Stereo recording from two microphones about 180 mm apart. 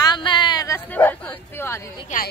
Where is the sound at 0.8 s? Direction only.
10° left (ahead or behind).